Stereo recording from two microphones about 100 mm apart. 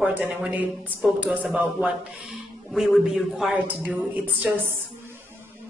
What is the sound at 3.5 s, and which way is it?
Speech, 15° right (ahead or behind).